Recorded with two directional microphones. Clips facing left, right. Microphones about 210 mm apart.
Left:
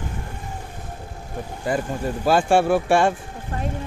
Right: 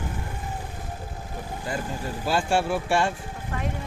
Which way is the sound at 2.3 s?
55° left (ahead or behind).